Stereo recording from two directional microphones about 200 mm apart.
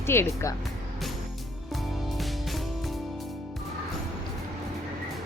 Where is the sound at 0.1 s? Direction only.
10° left (ahead or behind).